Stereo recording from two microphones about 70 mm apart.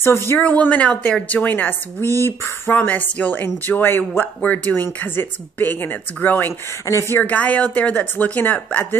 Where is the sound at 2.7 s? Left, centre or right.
Left.